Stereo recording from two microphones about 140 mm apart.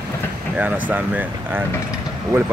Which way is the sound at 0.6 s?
10° right (ahead or behind).